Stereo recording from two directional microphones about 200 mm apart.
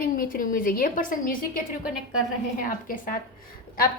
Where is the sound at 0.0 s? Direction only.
45° left (ahead or behind).